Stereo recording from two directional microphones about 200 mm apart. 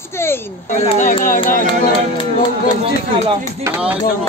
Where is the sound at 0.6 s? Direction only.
35° left (ahead or behind).